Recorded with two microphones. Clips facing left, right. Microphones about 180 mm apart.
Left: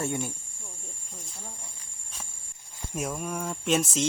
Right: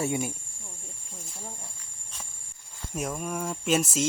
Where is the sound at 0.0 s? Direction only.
10° right (ahead or behind).